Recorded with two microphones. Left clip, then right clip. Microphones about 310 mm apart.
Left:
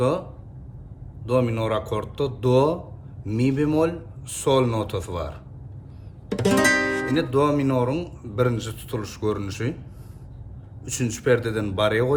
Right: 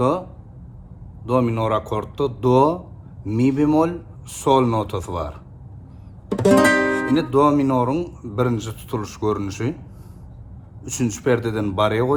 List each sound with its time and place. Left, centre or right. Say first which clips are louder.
1.2 s speech: right 3 dB; centre
6.3 s music: right 6 dB; centre
7.1 s speech: right 5 dB; centre
10.8 s speech: right 1 dB; centre